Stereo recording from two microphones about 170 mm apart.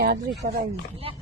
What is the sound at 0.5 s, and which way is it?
Speech, 35° right (ahead or behind).